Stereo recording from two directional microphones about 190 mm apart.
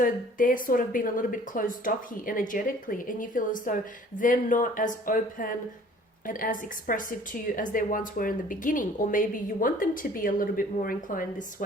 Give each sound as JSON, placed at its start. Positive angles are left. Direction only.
{"t": 0.0, "sound": "a woman's voice", "side_deg": 45}